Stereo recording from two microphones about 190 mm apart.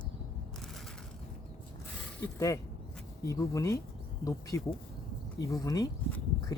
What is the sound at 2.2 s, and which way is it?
Speech, 15° left (ahead or behind).